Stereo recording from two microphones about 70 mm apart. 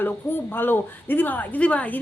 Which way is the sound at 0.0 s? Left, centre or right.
Left.